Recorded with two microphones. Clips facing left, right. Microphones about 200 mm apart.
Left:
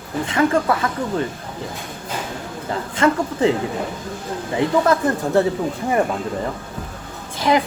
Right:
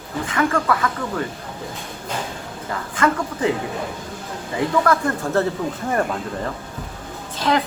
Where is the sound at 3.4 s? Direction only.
25° left (ahead or behind).